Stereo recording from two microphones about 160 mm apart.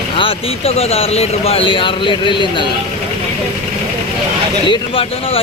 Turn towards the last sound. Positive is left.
turn(degrees=35)  # may be behind; listen again after turning